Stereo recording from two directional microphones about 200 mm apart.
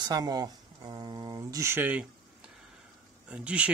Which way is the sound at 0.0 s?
20° right (ahead or behind).